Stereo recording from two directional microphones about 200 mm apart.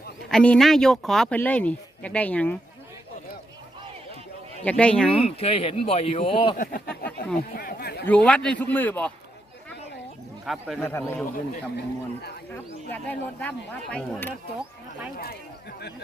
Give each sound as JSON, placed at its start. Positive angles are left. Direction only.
{"t": 0.3, "sound": "speech", "side_deg": 5}
{"t": 4.6, "sound": "speech", "side_deg": 5}
{"t": 5.2, "sound": "speech", "side_deg": 30}
{"t": 6.6, "sound": "speech", "side_deg": 45}
{"t": 7.3, "sound": "a sound", "side_deg": 45}
{"t": 8.0, "sound": "speech", "side_deg": 5}
{"t": 10.4, "sound": "speech", "side_deg": 0}
{"t": 10.8, "sound": "speech", "side_deg": 10}
{"t": 12.5, "sound": "speech", "side_deg": 10}